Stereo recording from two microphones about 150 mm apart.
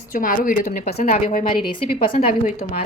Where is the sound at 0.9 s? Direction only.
45° left (ahead or behind).